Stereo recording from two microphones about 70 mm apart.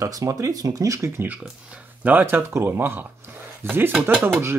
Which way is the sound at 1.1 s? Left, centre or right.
Right.